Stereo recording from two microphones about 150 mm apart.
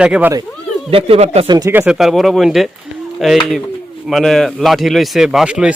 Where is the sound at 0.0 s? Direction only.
10° right (ahead or behind).